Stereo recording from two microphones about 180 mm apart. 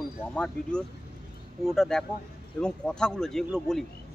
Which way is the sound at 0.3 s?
5° left (ahead or behind).